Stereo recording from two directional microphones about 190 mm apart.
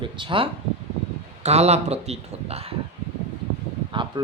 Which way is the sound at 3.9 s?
25° right (ahead or behind).